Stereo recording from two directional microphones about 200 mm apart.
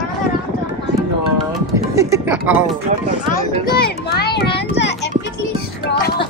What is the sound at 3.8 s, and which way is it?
A child's voice, 50° left (ahead or behind).